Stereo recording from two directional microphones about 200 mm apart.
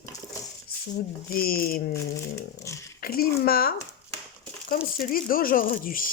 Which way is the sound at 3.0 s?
50° left (ahead or behind).